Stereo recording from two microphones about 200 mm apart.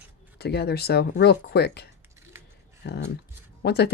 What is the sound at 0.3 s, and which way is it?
Speech, 55° left (ahead or behind).